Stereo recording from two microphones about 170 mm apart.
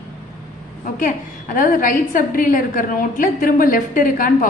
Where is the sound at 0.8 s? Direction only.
50° left (ahead or behind).